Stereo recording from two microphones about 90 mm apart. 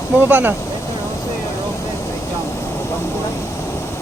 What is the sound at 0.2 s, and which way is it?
Speech, 20° right (ahead or behind).